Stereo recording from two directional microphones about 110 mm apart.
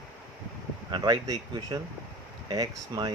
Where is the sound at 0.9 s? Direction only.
40° right (ahead or behind).